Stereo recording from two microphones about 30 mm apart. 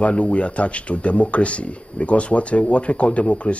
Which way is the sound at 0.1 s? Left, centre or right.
Left.